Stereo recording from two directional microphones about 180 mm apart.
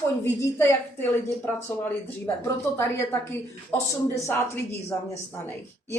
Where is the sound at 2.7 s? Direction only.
10° left (ahead or behind).